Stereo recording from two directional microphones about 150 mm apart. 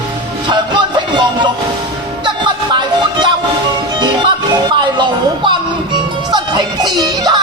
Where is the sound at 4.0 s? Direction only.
30° right (ahead or behind).